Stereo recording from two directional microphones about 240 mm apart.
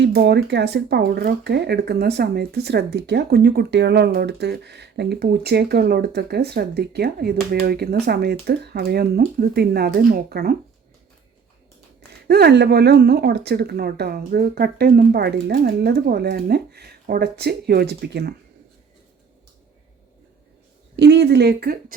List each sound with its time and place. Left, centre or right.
0.0 s speech: right
12.3 s speech: right
20.9 s speech: right